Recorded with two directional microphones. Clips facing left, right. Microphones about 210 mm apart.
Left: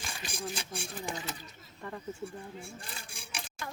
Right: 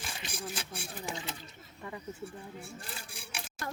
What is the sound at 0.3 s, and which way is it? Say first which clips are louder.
Speech: left 3 dB; 5° right (ahead or behind).